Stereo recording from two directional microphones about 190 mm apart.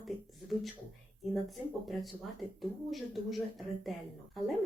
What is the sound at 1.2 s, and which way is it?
Speech, centre (ahead or behind).